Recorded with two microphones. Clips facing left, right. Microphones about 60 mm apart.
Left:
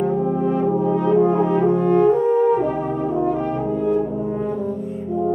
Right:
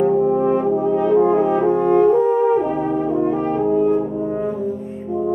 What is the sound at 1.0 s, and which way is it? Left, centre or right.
French horn, right.